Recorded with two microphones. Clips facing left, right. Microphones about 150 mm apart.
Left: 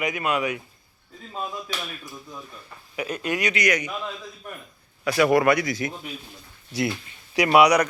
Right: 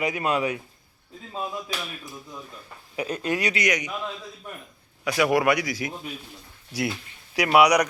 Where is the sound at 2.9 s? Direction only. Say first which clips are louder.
Right 1 dB; 30° right (ahead or behind).